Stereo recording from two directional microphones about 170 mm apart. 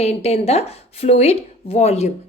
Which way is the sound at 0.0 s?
40° left (ahead or behind).